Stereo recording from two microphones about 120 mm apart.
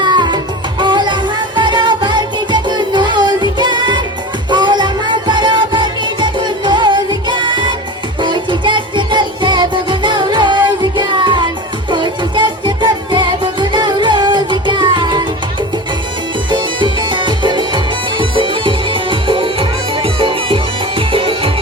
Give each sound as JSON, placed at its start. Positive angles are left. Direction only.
{"t": 0.0, "sound": "music", "side_deg": -40}
{"t": 16.5, "sound": "music", "side_deg": -40}